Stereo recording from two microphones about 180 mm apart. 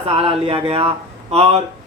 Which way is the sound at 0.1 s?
30° right (ahead or behind).